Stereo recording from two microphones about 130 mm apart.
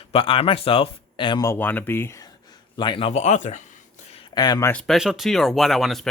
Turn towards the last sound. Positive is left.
turn(degrees=0)  # may be behind; listen again after turning